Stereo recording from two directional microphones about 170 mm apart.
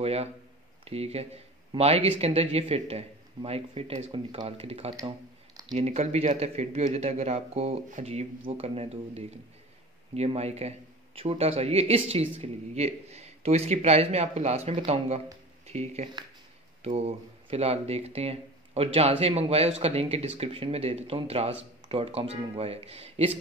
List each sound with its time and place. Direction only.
0.0 s speech: 35° right (ahead or behind)